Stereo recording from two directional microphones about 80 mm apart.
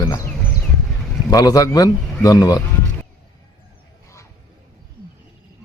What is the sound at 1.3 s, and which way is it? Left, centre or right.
A man's voice, left.